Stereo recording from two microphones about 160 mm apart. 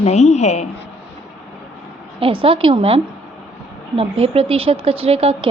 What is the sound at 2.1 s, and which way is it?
A woman's voice, 35° right (ahead or behind).